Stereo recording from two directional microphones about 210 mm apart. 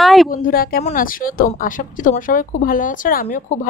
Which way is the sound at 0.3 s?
45° left (ahead or behind).